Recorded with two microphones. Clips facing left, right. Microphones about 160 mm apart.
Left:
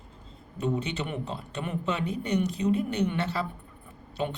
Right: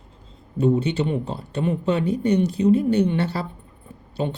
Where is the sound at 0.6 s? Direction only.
30° right (ahead or behind).